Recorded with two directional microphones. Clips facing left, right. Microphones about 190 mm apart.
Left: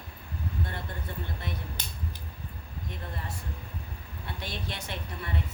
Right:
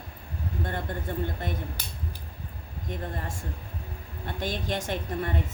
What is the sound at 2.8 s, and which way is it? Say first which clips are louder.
Speech: right 6 dB; 50° right (ahead or behind).